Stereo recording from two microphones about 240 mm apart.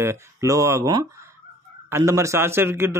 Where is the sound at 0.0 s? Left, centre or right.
Centre.